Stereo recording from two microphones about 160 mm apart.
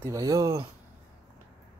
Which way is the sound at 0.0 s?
20° right (ahead or behind).